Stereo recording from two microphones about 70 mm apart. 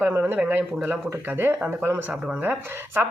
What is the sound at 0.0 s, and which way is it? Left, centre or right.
Speech, right.